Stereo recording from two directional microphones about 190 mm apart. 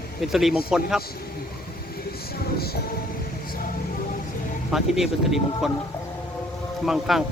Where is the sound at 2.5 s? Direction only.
55° left (ahead or behind).